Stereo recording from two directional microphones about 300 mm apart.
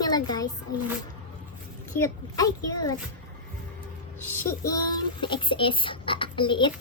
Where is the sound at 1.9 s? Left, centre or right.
Centre.